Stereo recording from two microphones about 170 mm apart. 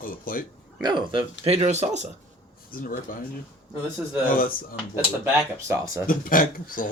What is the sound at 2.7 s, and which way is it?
Speech, 55° left (ahead or behind).